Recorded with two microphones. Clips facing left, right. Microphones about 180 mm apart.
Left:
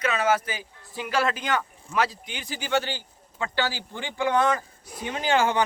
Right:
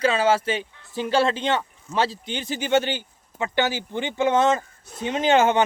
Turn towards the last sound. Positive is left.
turn(degrees=-20)  # may be behind; listen again after turning